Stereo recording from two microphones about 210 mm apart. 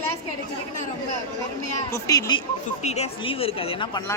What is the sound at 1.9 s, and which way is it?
Speech, 15° left (ahead or behind).